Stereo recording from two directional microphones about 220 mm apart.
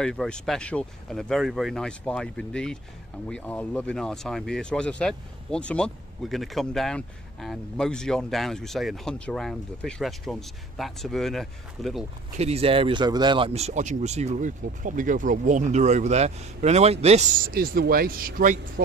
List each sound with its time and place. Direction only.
0.0 s speech: 5° left (ahead or behind)
12.4 s speech: 30° right (ahead or behind)
17.5 s speech: 45° right (ahead or behind)